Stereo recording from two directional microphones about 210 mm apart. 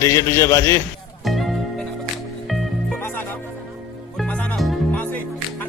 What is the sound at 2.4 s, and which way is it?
Music, centre (ahead or behind).